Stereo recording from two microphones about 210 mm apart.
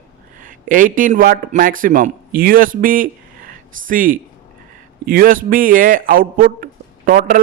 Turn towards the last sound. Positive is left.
turn(degrees=-40)  # may be behind; listen again after turning